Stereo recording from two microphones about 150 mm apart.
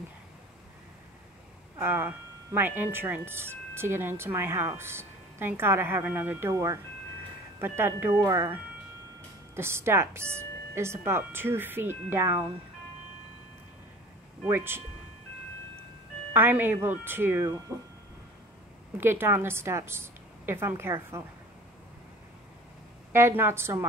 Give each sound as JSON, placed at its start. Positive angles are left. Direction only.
{"t": 1.8, "sound": "speech", "side_deg": -15}
{"t": 9.6, "sound": "speech", "side_deg": -15}
{"t": 14.4, "sound": "speech", "side_deg": -15}
{"t": 16.3, "sound": "speech", "side_deg": -15}
{"t": 17.7, "sound": "speech", "side_deg": -5}
{"t": 18.9, "sound": "speech", "side_deg": -15}
{"t": 23.1, "sound": "speech", "side_deg": -15}